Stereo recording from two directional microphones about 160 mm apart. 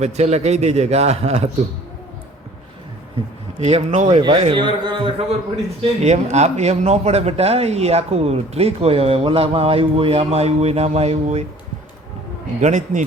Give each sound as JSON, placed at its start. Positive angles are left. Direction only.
{"t": 0.0, "sound": "a man's voice", "side_deg": -45}
{"t": 3.6, "sound": "a man's voice", "side_deg": -45}
{"t": 4.2, "sound": "speech", "side_deg": -30}
{"t": 6.0, "sound": "speech", "side_deg": -45}
{"t": 12.5, "sound": "a man's voice", "side_deg": -50}